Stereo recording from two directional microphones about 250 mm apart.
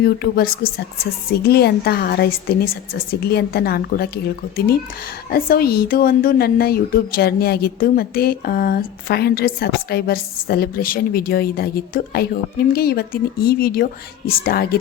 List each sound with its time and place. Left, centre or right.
0.0 s speech: left